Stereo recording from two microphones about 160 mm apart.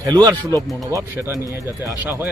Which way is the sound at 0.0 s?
25° right (ahead or behind).